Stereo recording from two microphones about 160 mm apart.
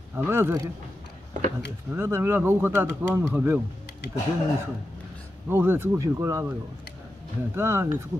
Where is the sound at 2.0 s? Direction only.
15° right (ahead or behind).